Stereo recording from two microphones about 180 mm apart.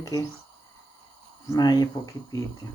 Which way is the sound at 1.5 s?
20° left (ahead or behind).